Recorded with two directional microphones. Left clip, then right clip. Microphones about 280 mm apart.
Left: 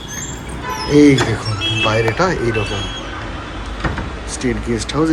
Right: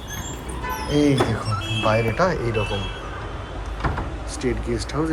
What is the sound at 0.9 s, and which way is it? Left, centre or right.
Speech, centre.